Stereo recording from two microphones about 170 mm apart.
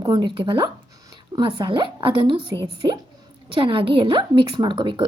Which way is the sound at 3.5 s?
30° right (ahead or behind).